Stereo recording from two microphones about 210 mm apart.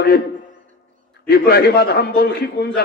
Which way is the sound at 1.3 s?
50° left (ahead or behind).